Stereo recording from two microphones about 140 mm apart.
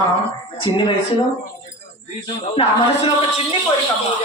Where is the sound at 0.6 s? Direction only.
35° left (ahead or behind).